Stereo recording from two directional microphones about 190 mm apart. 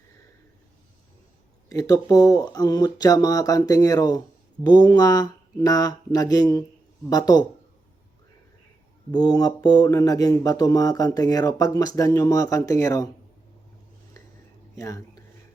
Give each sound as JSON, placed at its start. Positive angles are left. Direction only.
{"t": 1.7, "sound": "speech", "side_deg": 20}
{"t": 9.1, "sound": "speech", "side_deg": 20}
{"t": 14.8, "sound": "speech", "side_deg": 15}